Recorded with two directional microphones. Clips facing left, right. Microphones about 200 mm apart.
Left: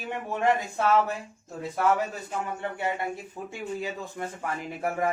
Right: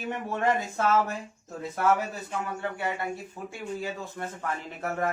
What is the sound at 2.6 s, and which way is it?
Speech, 20° left (ahead or behind).